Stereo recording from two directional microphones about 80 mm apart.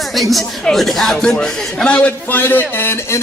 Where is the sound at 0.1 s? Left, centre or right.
Centre.